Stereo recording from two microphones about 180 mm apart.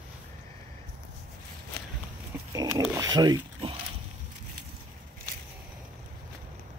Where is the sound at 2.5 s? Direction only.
20° right (ahead or behind).